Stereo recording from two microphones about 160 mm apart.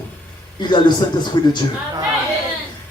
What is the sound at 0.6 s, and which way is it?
Speech, 30° left (ahead or behind).